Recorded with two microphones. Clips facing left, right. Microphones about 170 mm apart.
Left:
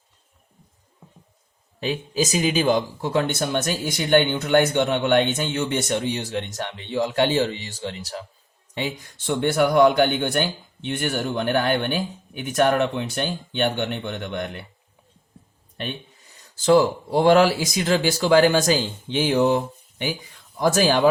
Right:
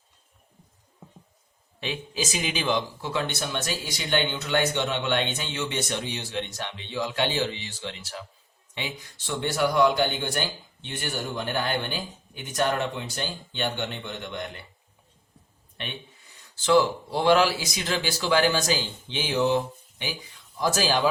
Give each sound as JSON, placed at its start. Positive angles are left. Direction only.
{"t": 1.8, "sound": "speech", "side_deg": 40}
{"t": 8.7, "sound": "speech", "side_deg": 50}
{"t": 16.6, "sound": "speech", "side_deg": 50}